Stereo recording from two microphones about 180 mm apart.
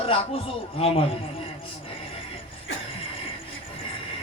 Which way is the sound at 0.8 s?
30° left (ahead or behind).